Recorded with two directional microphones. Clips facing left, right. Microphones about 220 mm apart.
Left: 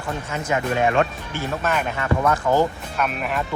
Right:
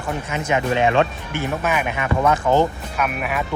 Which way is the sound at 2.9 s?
5° right (ahead or behind).